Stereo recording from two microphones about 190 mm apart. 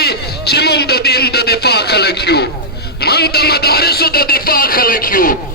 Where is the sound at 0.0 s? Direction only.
60° left (ahead or behind).